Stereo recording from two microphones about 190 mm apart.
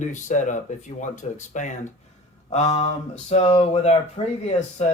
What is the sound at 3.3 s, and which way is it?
Speech, 35° left (ahead or behind).